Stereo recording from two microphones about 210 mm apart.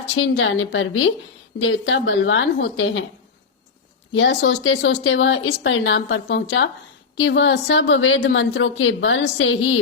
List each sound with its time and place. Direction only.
0.2 s speech: 65° left (ahead or behind)
4.1 s speech: 55° left (ahead or behind)